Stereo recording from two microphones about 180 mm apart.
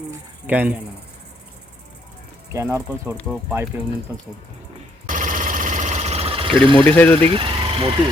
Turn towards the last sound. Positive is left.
turn(degrees=-30)  # may be behind; listen again after turning